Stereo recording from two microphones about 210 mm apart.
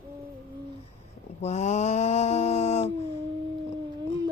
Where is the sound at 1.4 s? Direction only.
35° left (ahead or behind).